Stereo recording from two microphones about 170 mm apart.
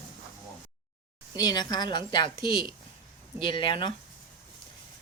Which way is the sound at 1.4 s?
25° left (ahead or behind).